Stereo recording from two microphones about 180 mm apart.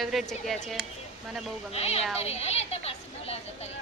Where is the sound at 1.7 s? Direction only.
35° left (ahead or behind).